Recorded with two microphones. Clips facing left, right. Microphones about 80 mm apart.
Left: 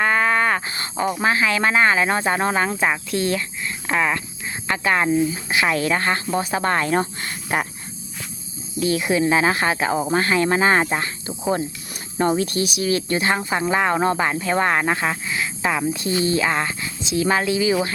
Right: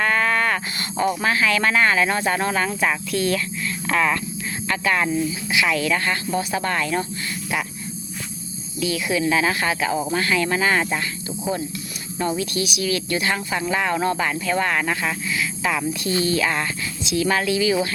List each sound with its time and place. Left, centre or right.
0.0 s speech: left
5.3 s speech: left
7.5 s snake: left
8.8 s speech: left